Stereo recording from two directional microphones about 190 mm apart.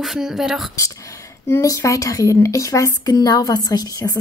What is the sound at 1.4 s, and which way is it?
Speech, 15° left (ahead or behind).